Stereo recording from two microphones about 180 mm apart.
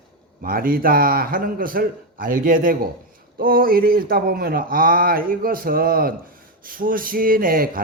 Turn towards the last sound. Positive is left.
turn(degrees=-55)  # may be behind; listen again after turning